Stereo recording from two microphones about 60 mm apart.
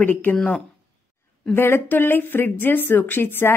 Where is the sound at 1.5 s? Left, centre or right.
Left.